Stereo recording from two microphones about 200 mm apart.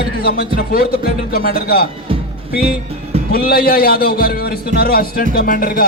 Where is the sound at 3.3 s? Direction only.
50° left (ahead or behind).